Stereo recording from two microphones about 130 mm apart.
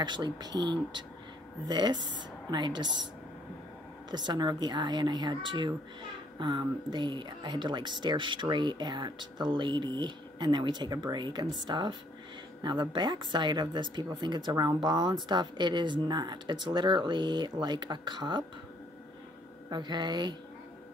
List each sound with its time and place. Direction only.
0.0 s speech: 35° right (ahead or behind)
4.1 s speech: 35° right (ahead or behind)
19.7 s speech: 35° right (ahead or behind)